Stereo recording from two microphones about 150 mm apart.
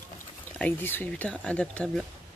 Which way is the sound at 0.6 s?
10° left (ahead or behind).